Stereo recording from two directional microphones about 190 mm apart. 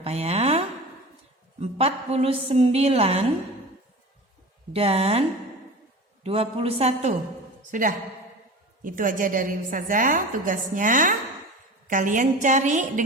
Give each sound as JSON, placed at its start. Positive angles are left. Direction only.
{"t": 0.0, "sound": "a sound", "side_deg": -35}
{"t": 1.6, "sound": "a woman's voice", "side_deg": -35}
{"t": 4.7, "sound": "a woman's voice", "side_deg": -30}
{"t": 6.2, "sound": "a woman's voice", "side_deg": -30}
{"t": 7.7, "sound": "a woman's voice", "side_deg": -45}